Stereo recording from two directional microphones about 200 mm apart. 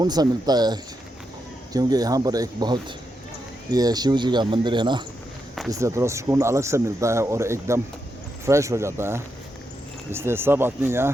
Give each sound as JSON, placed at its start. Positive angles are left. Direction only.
{"t": 0.0, "sound": "speech", "side_deg": -20}